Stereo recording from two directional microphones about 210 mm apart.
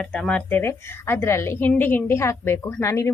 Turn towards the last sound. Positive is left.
turn(degrees=15)  # may be behind; listen again after turning